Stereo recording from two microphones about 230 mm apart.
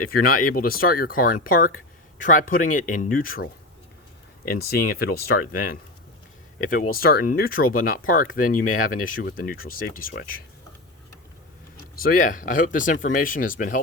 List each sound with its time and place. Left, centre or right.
0.1 s speech: left
11.9 s speech: left